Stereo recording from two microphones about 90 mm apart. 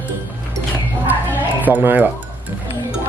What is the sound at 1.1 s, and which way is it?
Music, 20° right (ahead or behind).